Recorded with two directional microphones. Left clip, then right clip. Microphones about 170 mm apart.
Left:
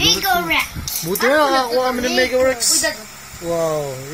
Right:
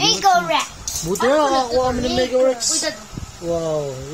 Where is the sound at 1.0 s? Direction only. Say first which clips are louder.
Left 1 dB; 5° right (ahead or behind).